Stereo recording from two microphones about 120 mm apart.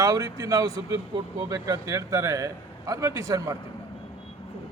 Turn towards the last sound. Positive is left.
turn(degrees=-30)  # may be behind; listen again after turning